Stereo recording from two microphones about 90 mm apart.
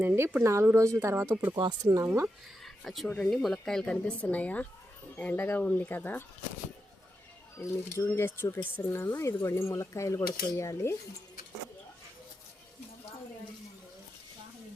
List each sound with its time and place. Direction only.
0.0 s speech: 20° right (ahead or behind)
1.5 s speech: 50° right (ahead or behind)
2.6 s a sound: centre (ahead or behind)
3.2 s speech: 5° left (ahead or behind); by 6.2 s 20° left (ahead or behind)
7.6 s speech: 30° left (ahead or behind)